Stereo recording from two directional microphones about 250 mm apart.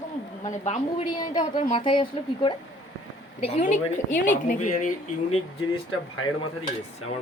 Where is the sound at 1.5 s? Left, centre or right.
Left.